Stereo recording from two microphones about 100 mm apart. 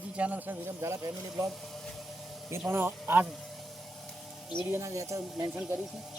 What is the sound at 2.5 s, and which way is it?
Speech, 20° right (ahead or behind).